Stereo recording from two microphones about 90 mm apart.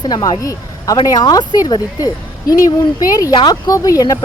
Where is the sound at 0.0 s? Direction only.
45° left (ahead or behind).